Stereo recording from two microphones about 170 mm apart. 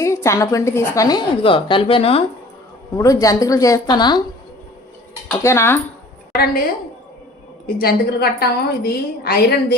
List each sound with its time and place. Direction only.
0.0 s a woman's voice: 15° left (ahead or behind); by 2.2 s 35° left (ahead or behind)
2.9 s a woman's voice: 20° left (ahead or behind)
5.4 s speech: 15° left (ahead or behind)
6.3 s a woman's voice: 65° left (ahead or behind)
7.8 s a woman's voice: 65° left (ahead or behind)